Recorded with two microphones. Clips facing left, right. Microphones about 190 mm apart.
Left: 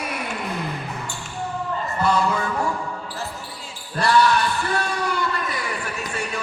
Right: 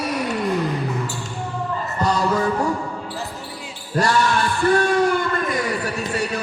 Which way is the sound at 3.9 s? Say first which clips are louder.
Left 1 dB; 45° right (ahead or behind).